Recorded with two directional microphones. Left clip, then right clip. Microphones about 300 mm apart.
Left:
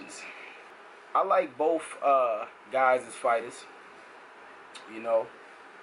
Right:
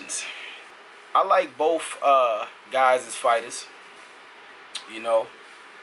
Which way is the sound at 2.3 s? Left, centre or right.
Centre.